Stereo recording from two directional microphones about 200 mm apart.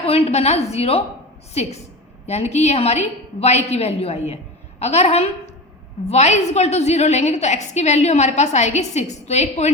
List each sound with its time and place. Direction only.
0.0 s a woman's voice: 30° left (ahead or behind)